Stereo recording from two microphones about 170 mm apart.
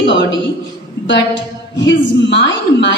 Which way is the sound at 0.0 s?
90° left.